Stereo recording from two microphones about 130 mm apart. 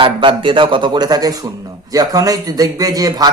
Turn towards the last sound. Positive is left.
turn(degrees=-30)  # may be behind; listen again after turning